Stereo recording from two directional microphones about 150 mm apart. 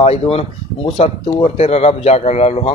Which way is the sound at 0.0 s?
40° left (ahead or behind).